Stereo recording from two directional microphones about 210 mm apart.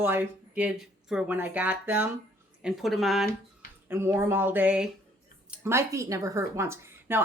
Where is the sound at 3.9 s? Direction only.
10° right (ahead or behind).